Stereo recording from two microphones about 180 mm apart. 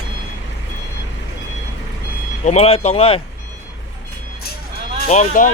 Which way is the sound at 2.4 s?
35° left (ahead or behind).